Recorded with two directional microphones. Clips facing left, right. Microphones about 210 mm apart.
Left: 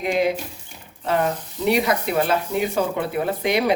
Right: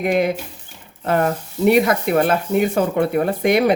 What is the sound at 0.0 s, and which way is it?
Speech, 55° right (ahead or behind).